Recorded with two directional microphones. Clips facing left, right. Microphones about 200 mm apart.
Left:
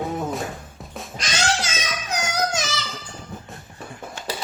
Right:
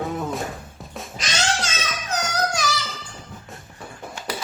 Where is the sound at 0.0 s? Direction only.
Centre (ahead or behind).